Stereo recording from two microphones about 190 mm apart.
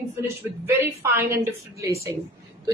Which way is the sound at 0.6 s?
10° right (ahead or behind).